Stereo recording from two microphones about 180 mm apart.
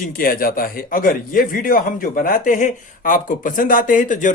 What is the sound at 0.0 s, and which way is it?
Speech, 50° left (ahead or behind).